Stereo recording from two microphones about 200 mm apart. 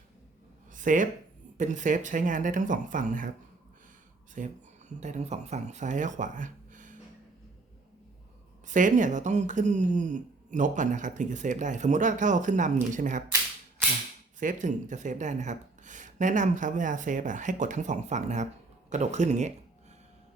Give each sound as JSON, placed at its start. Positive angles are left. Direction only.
{"t": 0.7, "sound": "a sound", "side_deg": -40}
{"t": 1.5, "sound": "speech", "side_deg": -40}
{"t": 4.4, "sound": "speech", "side_deg": -40}
{"t": 8.6, "sound": "speech", "side_deg": -40}
{"t": 14.3, "sound": "speech", "side_deg": -40}